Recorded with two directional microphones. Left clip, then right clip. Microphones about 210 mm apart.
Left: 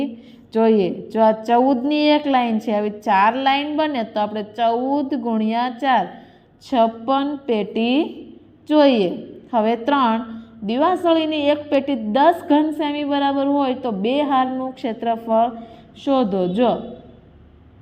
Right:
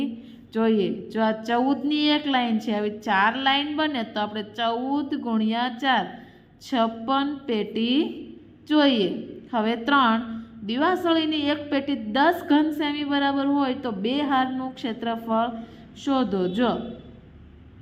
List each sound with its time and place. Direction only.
0.5 s a woman's voice: 20° left (ahead or behind)